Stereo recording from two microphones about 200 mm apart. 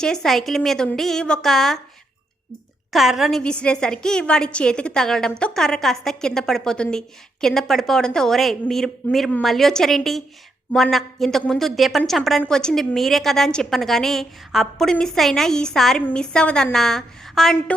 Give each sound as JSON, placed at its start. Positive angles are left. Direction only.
{"t": 0.0, "sound": "a woman's voice", "side_deg": 5}
{"t": 2.9, "sound": "a woman's voice", "side_deg": 0}